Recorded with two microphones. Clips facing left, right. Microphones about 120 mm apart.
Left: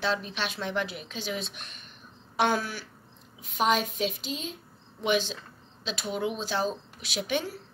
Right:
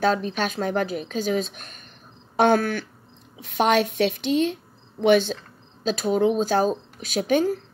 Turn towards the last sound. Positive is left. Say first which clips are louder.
# right 10 dB
turn(degrees=-45)  # may be behind; listen again after turning